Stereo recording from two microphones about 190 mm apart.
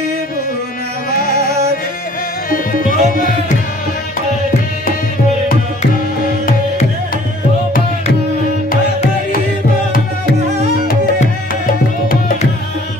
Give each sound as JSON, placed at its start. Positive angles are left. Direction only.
{"t": 1.1, "sound": "music", "side_deg": 50}
{"t": 2.5, "sound": "music", "side_deg": 45}
{"t": 11.1, "sound": "music", "side_deg": 45}